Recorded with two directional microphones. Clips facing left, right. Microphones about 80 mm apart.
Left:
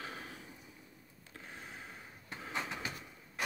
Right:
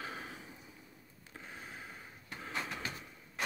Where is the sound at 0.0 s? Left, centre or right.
Centre.